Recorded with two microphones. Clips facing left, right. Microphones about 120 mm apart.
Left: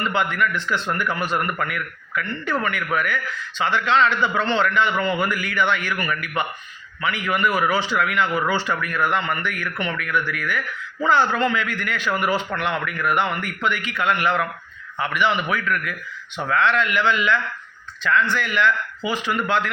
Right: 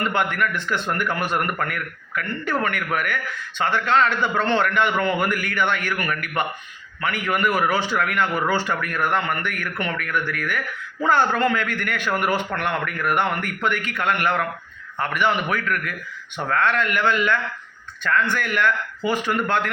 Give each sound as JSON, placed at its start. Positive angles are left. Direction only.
{"t": 0.0, "sound": "a man's voice", "side_deg": -50}